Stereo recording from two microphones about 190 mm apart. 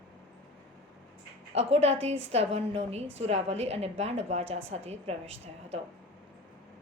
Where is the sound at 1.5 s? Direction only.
35° right (ahead or behind).